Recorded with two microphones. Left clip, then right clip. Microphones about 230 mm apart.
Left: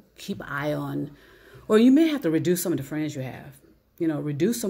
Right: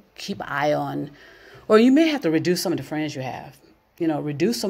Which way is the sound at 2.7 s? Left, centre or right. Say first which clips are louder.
Right 2 dB; right.